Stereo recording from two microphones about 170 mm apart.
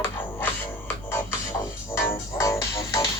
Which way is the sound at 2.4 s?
20° left (ahead or behind).